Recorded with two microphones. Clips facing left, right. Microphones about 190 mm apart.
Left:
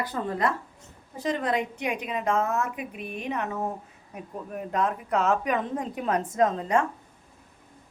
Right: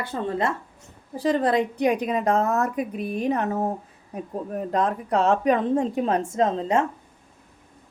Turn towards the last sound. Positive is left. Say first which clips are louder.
# right 2 dB
turn(degrees=-25)  # may be behind; listen again after turning